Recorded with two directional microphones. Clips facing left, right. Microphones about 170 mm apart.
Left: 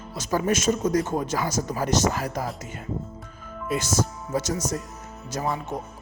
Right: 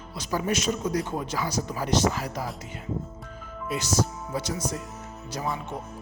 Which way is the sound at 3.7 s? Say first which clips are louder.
Left 1 dB; 50° left (ahead or behind).